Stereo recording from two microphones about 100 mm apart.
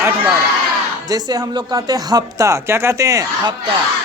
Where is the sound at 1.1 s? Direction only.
45° right (ahead or behind).